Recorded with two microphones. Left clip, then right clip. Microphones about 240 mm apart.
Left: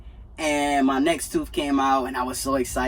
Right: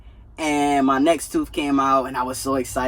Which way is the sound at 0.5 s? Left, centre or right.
Right.